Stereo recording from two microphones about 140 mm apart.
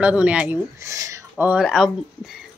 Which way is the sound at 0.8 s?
20° right (ahead or behind).